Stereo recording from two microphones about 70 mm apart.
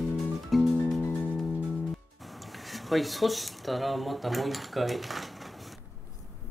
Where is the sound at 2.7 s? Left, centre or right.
Centre.